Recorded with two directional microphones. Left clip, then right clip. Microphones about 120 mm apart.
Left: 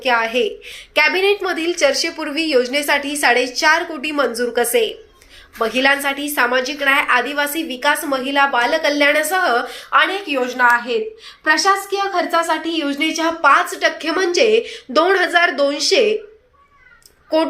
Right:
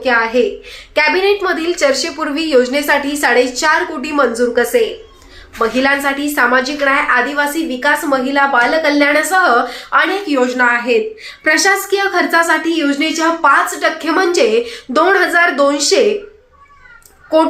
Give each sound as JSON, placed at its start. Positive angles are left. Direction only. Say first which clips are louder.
{"t": 0.0, "sound": "a woman's voice", "louder": "right 4 dB", "side_deg": 15}
{"t": 6.8, "sound": "a woman's voice", "louder": "even", "side_deg": 20}
{"t": 10.0, "sound": "a woman's voice", "louder": "right 4 dB", "side_deg": -5}
{"t": 10.6, "sound": "a woman's voice", "louder": "even", "side_deg": 10}
{"t": 12.6, "sound": "a woman's voice", "louder": "right 4 dB", "side_deg": 40}
{"t": 14.1, "sound": "a woman's voice", "louder": "right 3 dB", "side_deg": 20}
{"t": 17.3, "sound": "a woman's voice", "louder": "right 5 dB", "side_deg": 15}